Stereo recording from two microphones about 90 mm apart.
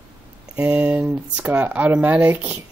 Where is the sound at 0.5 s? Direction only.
15° right (ahead or behind).